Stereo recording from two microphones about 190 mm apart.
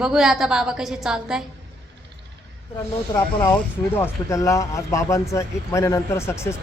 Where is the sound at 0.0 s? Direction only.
Centre (ahead or behind).